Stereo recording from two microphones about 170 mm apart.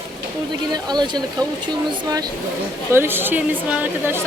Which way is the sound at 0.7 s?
25° right (ahead or behind).